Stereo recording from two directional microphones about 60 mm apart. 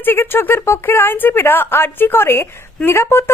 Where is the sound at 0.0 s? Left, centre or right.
Left.